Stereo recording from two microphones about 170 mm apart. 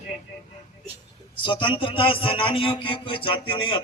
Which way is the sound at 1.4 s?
30° left (ahead or behind).